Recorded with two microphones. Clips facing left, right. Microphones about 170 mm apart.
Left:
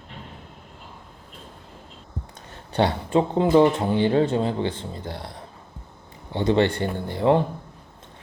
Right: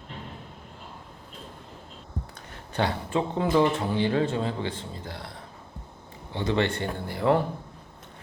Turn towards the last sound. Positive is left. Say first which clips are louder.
# left 4 dB
turn(degrees=25)  # may be behind; listen again after turning